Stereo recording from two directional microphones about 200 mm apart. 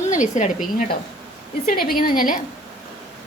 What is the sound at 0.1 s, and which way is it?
Speech, 40° left (ahead or behind).